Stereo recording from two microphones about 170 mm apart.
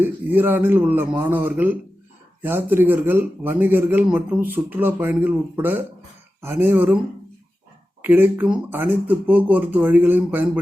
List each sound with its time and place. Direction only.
0.0 s a man's voice: 10° right (ahead or behind)
8.0 s a man's voice: 10° right (ahead or behind)